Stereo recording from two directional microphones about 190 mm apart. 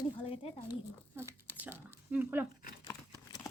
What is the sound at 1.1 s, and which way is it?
Tearing, 10° right (ahead or behind).